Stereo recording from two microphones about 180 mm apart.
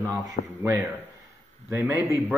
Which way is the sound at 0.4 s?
45° left (ahead or behind).